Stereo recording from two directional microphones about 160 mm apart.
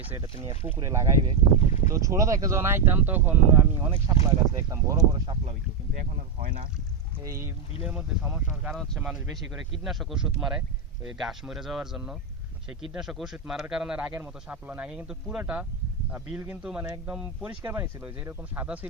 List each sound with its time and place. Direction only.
0.0 s speech: 10° right (ahead or behind)
1.5 s speech: 45° left (ahead or behind)
1.9 s speech: 20° right (ahead or behind)
7.2 s speech: 20° right (ahead or behind)